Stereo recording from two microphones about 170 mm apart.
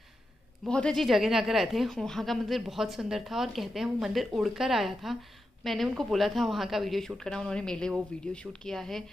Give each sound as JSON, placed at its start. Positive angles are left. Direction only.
{"t": 0.7, "sound": "a woman's voice", "side_deg": 5}